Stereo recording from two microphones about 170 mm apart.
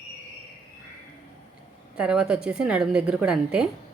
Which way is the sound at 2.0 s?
5° right (ahead or behind).